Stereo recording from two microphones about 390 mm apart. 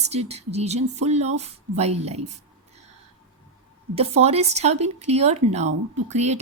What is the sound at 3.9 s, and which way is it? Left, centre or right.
A woman's voice, centre.